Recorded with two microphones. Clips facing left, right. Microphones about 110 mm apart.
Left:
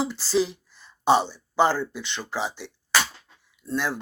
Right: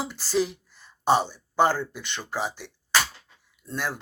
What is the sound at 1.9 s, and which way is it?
Speech, 50° right (ahead or behind).